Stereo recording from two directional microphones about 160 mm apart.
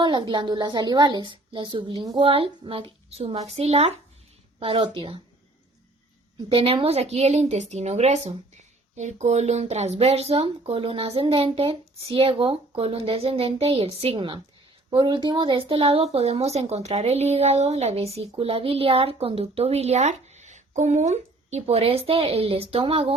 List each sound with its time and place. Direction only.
0.0 s a woman's voice: 30° right (ahead or behind)
6.5 s a woman's voice: 35° right (ahead or behind)